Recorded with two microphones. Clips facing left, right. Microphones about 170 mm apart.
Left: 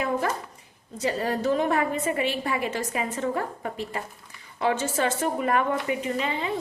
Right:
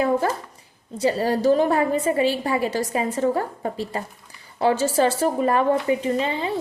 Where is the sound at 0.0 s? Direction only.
30° right (ahead or behind).